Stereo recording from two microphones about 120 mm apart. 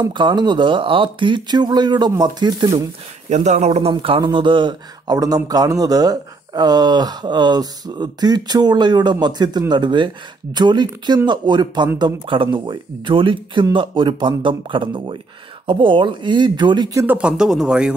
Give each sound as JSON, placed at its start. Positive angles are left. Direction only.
{"t": 0.0, "sound": "speech", "side_deg": -40}
{"t": 3.3, "sound": "speech", "side_deg": -75}
{"t": 3.9, "sound": "speech", "side_deg": -45}
{"t": 17.0, "sound": "speech", "side_deg": -15}